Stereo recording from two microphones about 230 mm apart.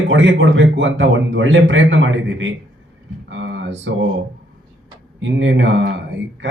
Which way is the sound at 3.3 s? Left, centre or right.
Right.